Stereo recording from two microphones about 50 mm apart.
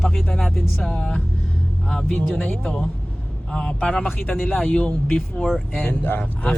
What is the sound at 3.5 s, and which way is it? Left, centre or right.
Speech, centre.